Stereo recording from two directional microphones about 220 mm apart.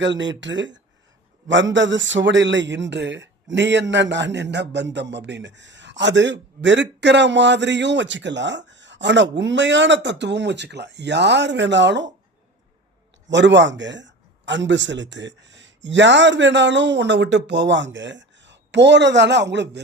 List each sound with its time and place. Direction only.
0.0 s a man's voice: 55° right (ahead or behind)
13.3 s a man's voice: 55° right (ahead or behind)